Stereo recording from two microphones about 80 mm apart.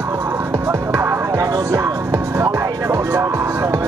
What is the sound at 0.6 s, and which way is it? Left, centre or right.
Music, right.